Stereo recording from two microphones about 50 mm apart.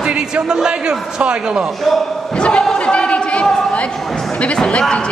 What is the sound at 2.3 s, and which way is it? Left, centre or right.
Speech, centre.